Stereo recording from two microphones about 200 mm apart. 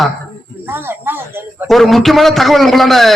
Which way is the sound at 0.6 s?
10° right (ahead or behind).